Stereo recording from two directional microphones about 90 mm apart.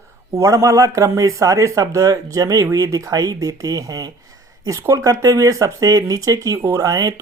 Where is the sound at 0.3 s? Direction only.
40° right (ahead or behind).